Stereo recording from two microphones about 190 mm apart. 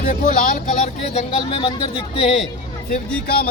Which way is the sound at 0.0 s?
45° left (ahead or behind).